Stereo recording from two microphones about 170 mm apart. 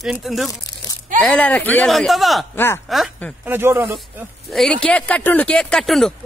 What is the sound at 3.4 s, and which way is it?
Speech, 10° right (ahead or behind).